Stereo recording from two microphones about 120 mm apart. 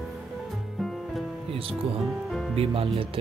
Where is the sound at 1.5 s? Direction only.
50° right (ahead or behind).